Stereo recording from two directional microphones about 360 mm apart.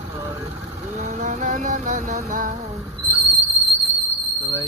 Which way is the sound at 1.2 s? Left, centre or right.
Centre.